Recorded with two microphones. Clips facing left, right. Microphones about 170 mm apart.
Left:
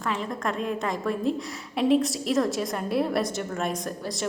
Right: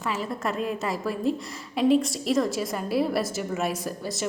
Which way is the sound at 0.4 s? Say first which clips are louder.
Even; 5° right (ahead or behind).